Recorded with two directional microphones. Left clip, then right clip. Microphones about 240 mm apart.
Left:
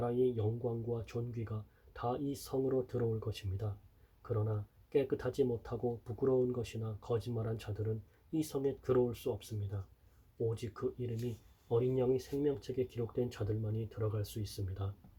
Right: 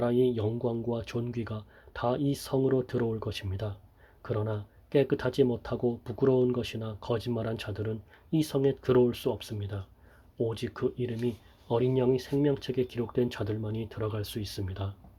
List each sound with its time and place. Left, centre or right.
0.0 s speech: right